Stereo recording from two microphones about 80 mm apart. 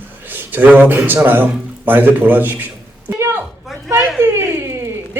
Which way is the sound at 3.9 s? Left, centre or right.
Right.